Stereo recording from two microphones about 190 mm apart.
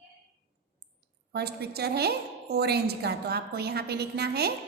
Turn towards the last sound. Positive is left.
turn(degrees=-55)  # may be behind; listen again after turning